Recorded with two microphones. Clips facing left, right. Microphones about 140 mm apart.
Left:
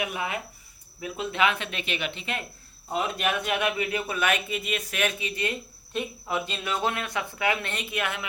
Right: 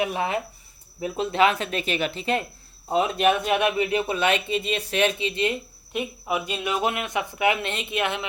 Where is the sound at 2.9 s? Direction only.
25° right (ahead or behind).